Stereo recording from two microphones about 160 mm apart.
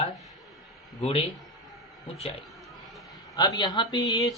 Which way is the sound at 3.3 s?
25° left (ahead or behind).